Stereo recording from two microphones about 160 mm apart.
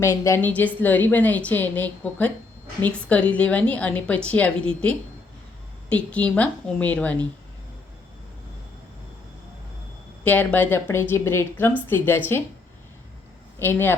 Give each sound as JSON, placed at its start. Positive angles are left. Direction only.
{"t": 0.0, "sound": "a woman's voice", "side_deg": 15}
{"t": 10.2, "sound": "a woman's voice", "side_deg": 10}
{"t": 13.6, "sound": "a woman's voice", "side_deg": 15}